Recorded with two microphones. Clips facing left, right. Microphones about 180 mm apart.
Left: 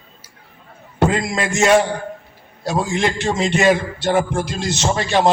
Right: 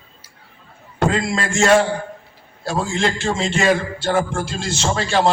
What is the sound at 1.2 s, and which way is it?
Speech, 20° left (ahead or behind).